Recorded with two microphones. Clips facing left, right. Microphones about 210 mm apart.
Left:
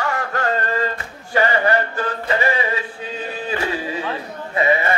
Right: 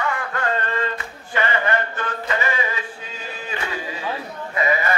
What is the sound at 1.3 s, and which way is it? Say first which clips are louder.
Chant: left 4 dB; 35° left (ahead or behind).